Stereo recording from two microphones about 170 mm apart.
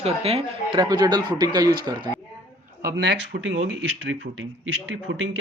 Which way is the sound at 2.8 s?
65° right (ahead or behind).